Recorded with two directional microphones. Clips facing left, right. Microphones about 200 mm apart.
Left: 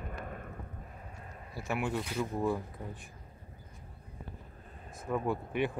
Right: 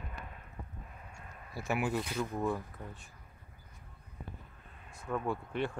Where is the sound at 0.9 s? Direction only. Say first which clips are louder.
Left 3 dB; 35° left (ahead or behind).